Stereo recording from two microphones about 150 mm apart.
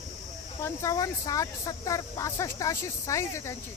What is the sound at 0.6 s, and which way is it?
Speech, 20° left (ahead or behind).